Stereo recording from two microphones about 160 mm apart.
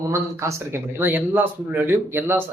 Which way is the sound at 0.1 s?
20° right (ahead or behind).